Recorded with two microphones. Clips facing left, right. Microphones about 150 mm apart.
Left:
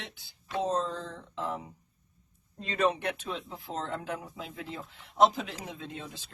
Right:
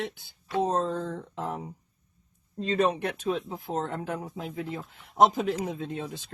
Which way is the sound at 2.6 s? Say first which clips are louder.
Right 3 dB; 35° right (ahead or behind).